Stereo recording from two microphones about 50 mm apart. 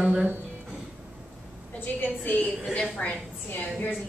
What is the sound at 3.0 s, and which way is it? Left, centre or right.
Speech, left.